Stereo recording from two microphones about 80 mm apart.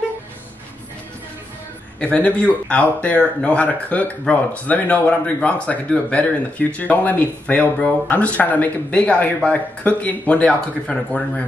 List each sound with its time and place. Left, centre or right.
2.0 s speech: centre